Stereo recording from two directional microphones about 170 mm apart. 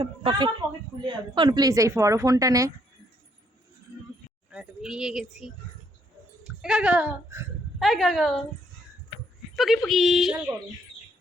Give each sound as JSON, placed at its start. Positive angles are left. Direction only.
{"t": 0.0, "sound": "speech", "side_deg": -30}
{"t": 4.5, "sound": "a woman's voice", "side_deg": -5}
{"t": 7.8, "sound": "a woman's voice", "side_deg": 0}
{"t": 9.6, "sound": "a woman's voice", "side_deg": 0}